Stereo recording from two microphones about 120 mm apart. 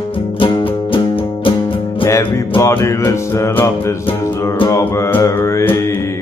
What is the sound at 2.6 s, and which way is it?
Music, 25° left (ahead or behind).